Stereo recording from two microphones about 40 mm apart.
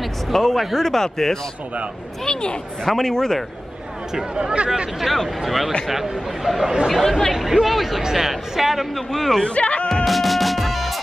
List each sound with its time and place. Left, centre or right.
0.0 s speech: centre
4.4 s speech: right
5.0 s speech: centre
7.3 s speech: centre
9.4 s speech: left
10.0 s music: centre